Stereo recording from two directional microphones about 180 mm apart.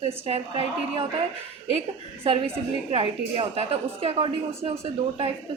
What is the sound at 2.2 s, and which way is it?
A woman's voice, 35° right (ahead or behind).